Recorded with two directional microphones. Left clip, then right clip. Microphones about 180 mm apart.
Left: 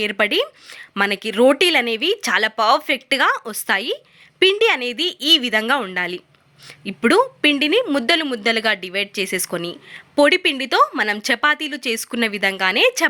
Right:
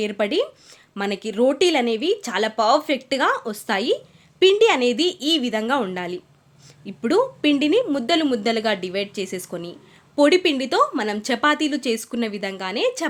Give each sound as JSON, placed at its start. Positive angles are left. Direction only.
{"t": 0.0, "sound": "a woman's voice", "side_deg": 15}